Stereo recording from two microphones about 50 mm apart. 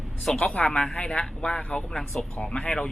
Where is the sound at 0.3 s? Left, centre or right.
Left.